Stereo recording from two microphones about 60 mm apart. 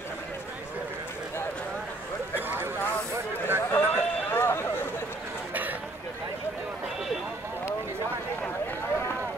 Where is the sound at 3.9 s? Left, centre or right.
Left.